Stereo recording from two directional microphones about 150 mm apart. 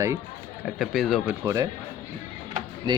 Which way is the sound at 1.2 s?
20° right (ahead or behind).